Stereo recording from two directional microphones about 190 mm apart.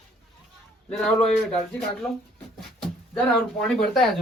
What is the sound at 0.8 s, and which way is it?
Speech, 5° left (ahead or behind).